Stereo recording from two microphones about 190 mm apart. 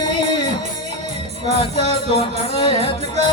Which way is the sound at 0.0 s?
25° left (ahead or behind).